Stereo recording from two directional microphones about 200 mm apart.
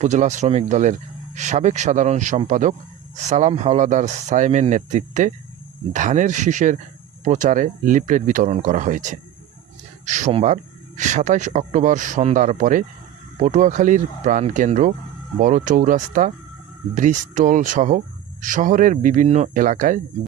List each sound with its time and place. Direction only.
0.0 s speech: 35° right (ahead or behind)